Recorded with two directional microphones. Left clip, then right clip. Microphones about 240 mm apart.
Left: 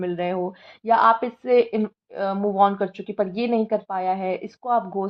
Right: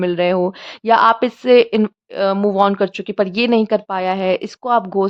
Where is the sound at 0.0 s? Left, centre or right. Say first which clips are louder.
Right 9 dB; right.